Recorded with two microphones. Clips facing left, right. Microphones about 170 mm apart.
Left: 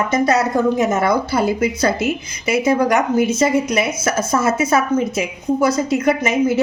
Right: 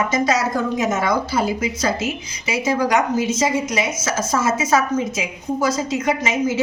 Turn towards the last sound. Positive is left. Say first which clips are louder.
# left 4 dB
turn(degrees=60)  # may be behind; listen again after turning